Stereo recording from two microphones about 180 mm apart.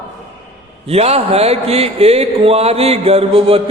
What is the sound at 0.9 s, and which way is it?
Speech, 35° right (ahead or behind).